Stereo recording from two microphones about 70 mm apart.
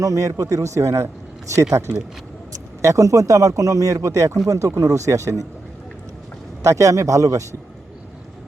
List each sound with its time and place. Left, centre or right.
0.0 s speech: right
2.8 s speech: right
6.6 s speech: right